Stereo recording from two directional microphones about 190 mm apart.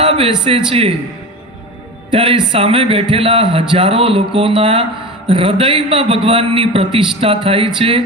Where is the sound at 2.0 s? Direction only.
25° right (ahead or behind).